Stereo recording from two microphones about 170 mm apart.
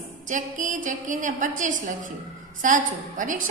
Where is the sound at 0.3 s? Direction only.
50° right (ahead or behind).